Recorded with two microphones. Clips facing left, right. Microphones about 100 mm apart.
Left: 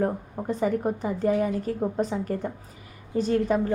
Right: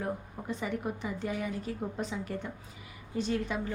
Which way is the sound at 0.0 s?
40° left (ahead or behind).